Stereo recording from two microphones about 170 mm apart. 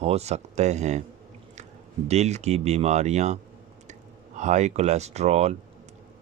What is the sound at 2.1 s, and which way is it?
Speech, 40° right (ahead or behind).